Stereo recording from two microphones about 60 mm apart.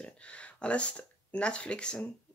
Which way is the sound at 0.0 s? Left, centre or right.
Centre.